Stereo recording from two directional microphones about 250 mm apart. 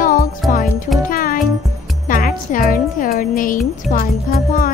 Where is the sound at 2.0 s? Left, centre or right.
Left.